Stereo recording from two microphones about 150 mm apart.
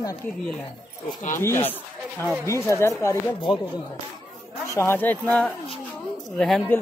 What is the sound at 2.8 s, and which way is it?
Speech, 20° left (ahead or behind).